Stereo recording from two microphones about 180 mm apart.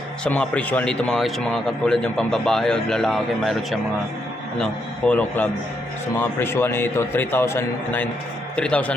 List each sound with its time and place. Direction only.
0.3 s a man's voice: 5° left (ahead or behind)